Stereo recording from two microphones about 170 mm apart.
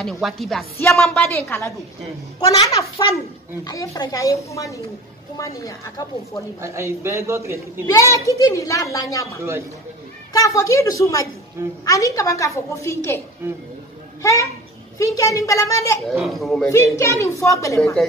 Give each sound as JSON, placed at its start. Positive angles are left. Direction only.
{"t": 0.0, "sound": "a woman's voice", "side_deg": 0}
{"t": 6.6, "sound": "a man's voice", "side_deg": -15}
{"t": 7.8, "sound": "a woman's voice", "side_deg": 20}
{"t": 9.4, "sound": "a man's voice", "side_deg": -15}
{"t": 10.3, "sound": "a woman's voice", "side_deg": 20}
{"t": 14.2, "sound": "a woman's voice", "side_deg": 20}
{"t": 16.1, "sound": "speech", "side_deg": 0}
{"t": 16.6, "sound": "a woman's voice", "side_deg": 20}